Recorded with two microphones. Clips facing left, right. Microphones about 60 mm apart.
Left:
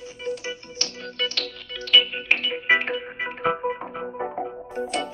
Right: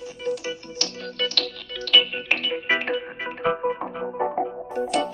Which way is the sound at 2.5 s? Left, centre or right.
Left.